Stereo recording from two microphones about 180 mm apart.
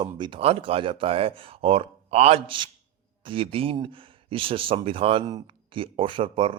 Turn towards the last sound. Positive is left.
turn(degrees=-30)  # may be behind; listen again after turning